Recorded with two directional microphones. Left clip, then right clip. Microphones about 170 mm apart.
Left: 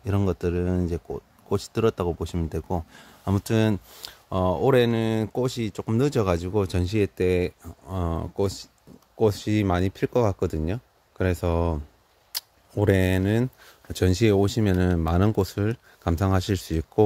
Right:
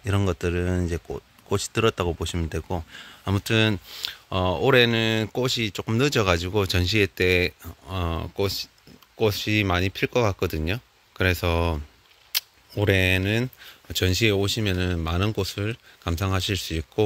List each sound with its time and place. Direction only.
0.0 s speech: 5° left (ahead or behind)
12.3 s speech: 30° left (ahead or behind)